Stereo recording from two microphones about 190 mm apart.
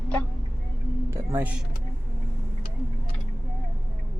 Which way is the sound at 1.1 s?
10° right (ahead or behind).